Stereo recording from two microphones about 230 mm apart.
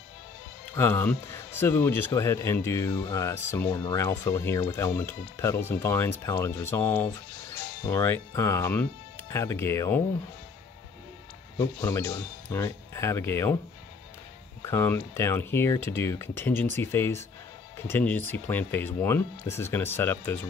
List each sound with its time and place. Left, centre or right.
0.7 s speech: centre
11.5 s speech: centre
14.6 s speech: centre